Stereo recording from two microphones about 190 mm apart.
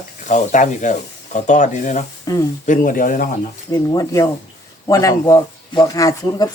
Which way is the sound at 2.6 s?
45° left (ahead or behind).